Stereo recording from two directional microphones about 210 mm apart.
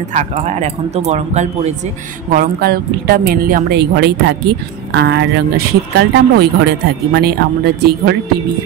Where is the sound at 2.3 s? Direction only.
45° right (ahead or behind).